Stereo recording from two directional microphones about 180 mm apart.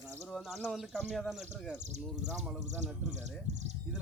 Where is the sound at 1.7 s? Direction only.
40° right (ahead or behind).